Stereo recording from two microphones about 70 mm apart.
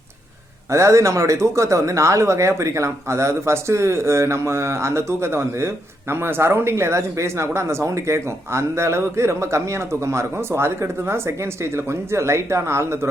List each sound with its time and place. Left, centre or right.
0.7 s speech: right